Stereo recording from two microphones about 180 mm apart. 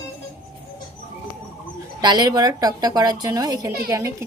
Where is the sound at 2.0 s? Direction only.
25° right (ahead or behind).